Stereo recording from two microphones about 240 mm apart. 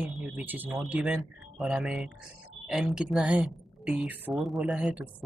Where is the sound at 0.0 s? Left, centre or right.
Centre.